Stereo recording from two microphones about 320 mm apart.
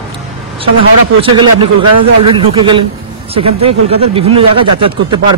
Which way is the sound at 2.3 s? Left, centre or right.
Centre.